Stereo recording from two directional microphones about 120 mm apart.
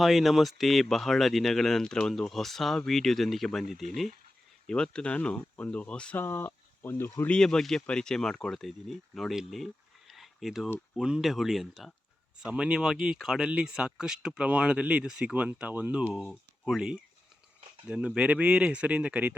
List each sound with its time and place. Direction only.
0.0 s speech: centre (ahead or behind)
10.1 s a sound: centre (ahead or behind)
10.9 s speech: 5° right (ahead or behind)